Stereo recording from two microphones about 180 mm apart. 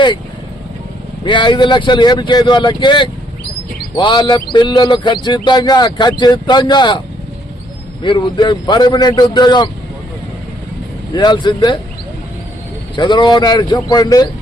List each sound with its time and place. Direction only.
1.2 s speech: 25° left (ahead or behind)
8.0 s speech: 25° left (ahead or behind)
11.1 s speech: 25° left (ahead or behind)
13.0 s speech: 25° left (ahead or behind)